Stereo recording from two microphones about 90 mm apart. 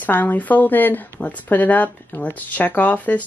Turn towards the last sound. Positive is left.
turn(degrees=15)  # may be behind; listen again after turning